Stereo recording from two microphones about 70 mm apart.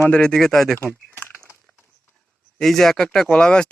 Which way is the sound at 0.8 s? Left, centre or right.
Left.